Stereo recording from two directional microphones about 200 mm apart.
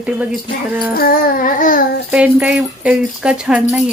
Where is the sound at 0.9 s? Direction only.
50° left (ahead or behind).